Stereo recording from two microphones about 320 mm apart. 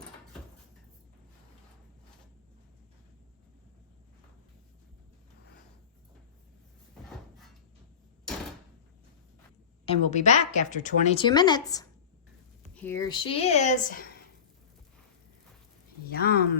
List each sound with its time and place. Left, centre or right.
9.8 s speech: centre
16.0 s speech: left